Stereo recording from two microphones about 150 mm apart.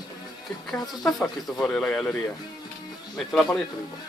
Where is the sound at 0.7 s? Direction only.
5° left (ahead or behind).